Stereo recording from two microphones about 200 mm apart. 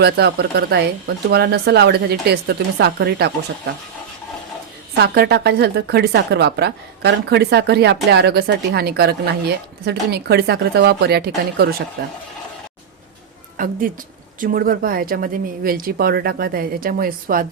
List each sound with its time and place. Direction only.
0.0 s speech: 55° right (ahead or behind)
4.9 s speech: 55° right (ahead or behind)
13.6 s speech: 45° right (ahead or behind)